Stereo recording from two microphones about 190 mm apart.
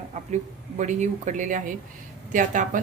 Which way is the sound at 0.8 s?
40° right (ahead or behind).